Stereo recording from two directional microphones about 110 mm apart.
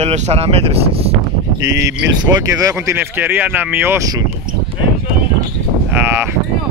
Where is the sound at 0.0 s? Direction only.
75° right (ahead or behind).